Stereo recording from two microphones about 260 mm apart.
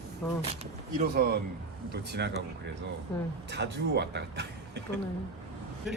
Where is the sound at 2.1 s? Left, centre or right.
Right.